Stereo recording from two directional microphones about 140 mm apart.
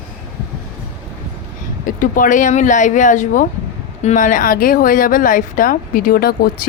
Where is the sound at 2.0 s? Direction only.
75° left (ahead or behind).